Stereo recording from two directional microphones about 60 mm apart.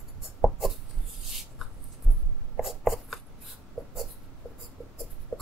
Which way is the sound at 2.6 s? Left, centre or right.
Centre.